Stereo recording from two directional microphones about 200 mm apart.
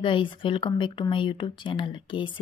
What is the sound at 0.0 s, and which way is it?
Speech, 25° left (ahead or behind).